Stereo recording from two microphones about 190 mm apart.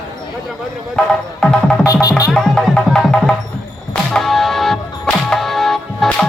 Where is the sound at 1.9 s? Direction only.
20° left (ahead or behind).